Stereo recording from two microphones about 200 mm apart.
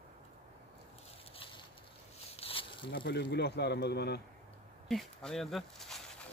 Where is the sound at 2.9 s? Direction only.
60° left (ahead or behind).